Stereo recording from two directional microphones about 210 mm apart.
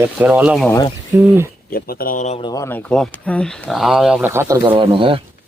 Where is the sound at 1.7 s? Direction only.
45° left (ahead or behind).